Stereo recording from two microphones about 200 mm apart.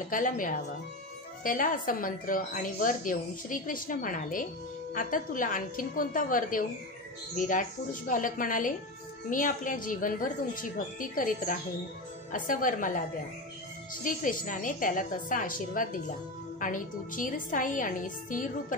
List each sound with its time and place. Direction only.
0.1 s a woman's voice: 40° left (ahead or behind)
14.0 s a woman's voice: 40° left (ahead or behind)